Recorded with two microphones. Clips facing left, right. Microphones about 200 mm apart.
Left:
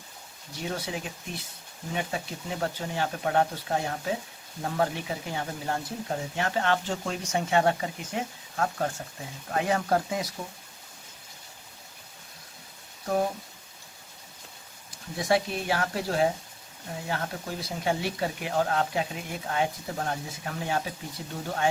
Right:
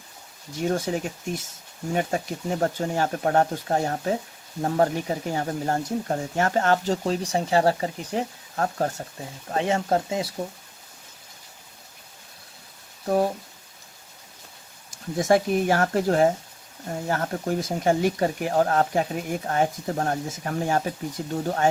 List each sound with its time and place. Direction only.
0.6 s speech: 45° right (ahead or behind)
9.5 s speech: 25° right (ahead or behind)
14.8 s speech: 45° right (ahead or behind)